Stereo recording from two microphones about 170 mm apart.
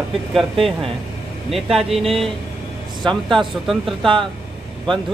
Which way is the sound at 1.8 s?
35° right (ahead or behind).